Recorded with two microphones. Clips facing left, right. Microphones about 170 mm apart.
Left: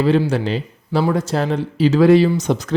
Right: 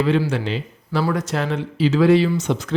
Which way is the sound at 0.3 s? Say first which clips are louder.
Left 4 dB; 40° left (ahead or behind).